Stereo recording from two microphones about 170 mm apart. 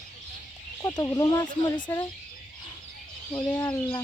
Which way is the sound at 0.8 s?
20° left (ahead or behind).